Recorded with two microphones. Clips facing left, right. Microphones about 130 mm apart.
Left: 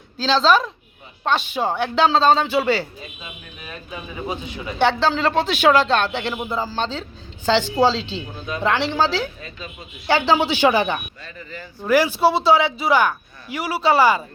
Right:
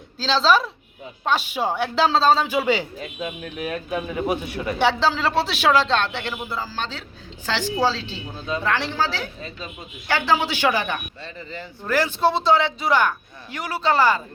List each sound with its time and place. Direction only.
0.2 s a woman's voice: centre (ahead or behind)
3.0 s a man's voice: 70° right (ahead or behind)
4.8 s speech: 5° right (ahead or behind)